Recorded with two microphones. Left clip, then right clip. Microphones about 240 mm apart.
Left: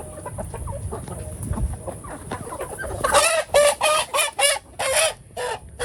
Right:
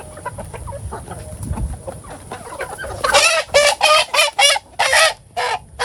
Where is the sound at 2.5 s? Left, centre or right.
Right.